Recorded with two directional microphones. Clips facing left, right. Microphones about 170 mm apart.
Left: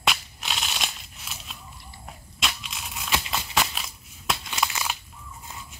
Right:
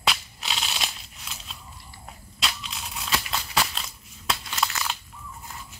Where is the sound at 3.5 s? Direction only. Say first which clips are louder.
Even; 5° left (ahead or behind).